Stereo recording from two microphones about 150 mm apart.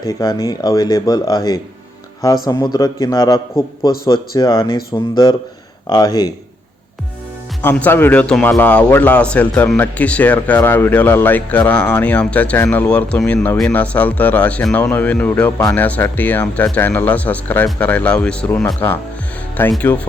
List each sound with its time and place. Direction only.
0.0 s speech: 25° left (ahead or behind)
7.6 s a man's voice: 15° left (ahead or behind)